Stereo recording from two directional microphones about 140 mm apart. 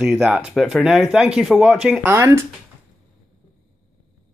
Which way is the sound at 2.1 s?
20° right (ahead or behind).